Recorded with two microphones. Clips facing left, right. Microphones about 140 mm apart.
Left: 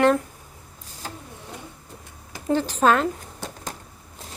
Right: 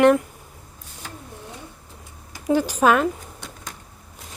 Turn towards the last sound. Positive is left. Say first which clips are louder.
# right 2 dB
turn(degrees=-10)  # may be behind; listen again after turning